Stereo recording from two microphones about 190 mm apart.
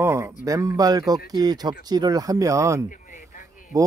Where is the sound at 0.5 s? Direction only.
20° right (ahead or behind).